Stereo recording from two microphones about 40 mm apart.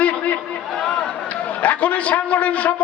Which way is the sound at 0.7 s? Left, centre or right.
Centre.